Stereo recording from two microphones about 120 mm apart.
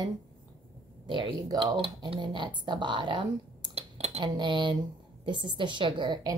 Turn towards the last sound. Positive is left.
turn(degrees=-40)  # may be behind; listen again after turning